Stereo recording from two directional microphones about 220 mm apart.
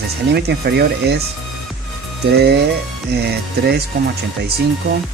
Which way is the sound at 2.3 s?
50° right (ahead or behind).